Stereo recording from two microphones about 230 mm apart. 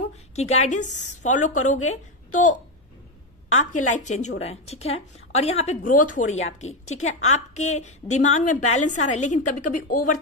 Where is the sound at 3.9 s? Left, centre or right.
Left.